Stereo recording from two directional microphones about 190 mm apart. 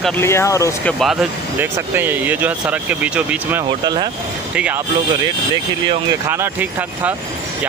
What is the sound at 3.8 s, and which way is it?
Speech, 20° right (ahead or behind).